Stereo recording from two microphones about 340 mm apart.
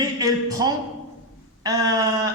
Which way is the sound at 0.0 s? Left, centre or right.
Centre.